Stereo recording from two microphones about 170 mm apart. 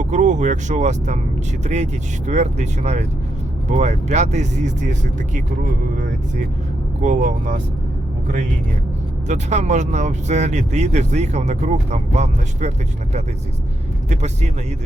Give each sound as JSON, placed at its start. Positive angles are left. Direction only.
{"t": 0.0, "sound": "speech", "side_deg": -45}
{"t": 7.0, "sound": "speech", "side_deg": -50}
{"t": 9.2, "sound": "speech", "side_deg": -45}
{"t": 14.1, "sound": "speech", "side_deg": -40}